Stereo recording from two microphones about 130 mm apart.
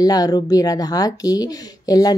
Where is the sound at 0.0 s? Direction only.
30° left (ahead or behind).